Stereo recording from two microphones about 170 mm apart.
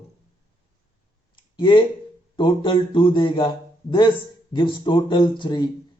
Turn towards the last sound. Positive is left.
turn(degrees=25)  # may be behind; listen again after turning